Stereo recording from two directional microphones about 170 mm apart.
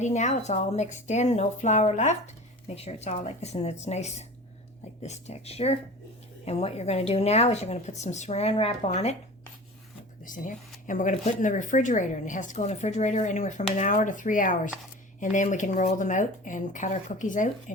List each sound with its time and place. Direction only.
0.0 s a woman's voice: 45° left (ahead or behind)
10.2 s a woman's voice: 50° left (ahead or behind)